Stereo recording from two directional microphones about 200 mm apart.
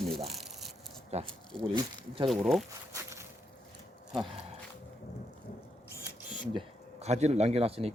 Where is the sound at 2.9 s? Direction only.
15° right (ahead or behind).